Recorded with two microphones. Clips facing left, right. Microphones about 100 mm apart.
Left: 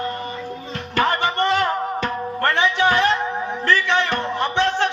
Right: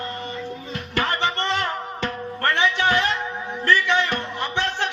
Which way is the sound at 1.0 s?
15° left (ahead or behind).